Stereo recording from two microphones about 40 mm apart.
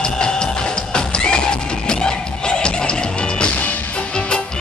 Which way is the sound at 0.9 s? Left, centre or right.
Left.